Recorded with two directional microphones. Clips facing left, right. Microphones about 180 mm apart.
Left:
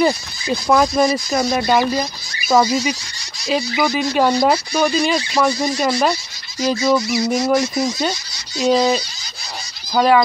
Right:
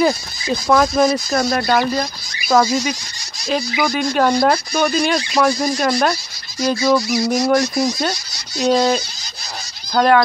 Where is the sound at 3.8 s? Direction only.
5° left (ahead or behind).